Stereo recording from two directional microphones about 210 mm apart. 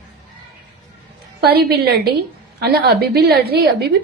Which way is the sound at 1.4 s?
50° right (ahead or behind).